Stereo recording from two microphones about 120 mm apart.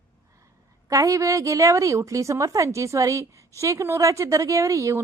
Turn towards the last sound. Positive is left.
turn(degrees=-25)  # may be behind; listen again after turning